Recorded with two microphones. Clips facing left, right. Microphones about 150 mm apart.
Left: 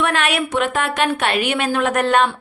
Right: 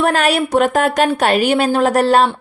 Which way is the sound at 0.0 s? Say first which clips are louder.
Right 5 dB; 40° right (ahead or behind).